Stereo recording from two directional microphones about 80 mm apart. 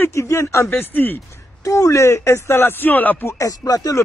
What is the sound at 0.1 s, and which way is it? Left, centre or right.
Speech, left.